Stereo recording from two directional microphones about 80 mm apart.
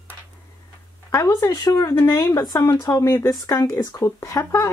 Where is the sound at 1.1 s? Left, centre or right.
Left.